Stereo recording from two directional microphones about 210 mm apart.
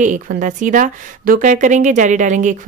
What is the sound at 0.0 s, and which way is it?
A woman's voice, 40° right (ahead or behind).